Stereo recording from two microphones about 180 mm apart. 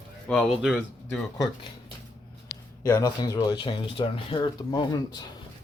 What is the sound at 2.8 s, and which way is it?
Speech, 20° left (ahead or behind).